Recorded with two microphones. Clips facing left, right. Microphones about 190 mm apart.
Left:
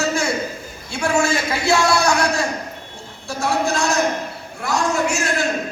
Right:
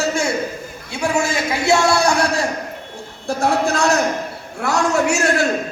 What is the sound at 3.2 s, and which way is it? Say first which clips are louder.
Speech: right 3 dB; 60° right (ahead or behind).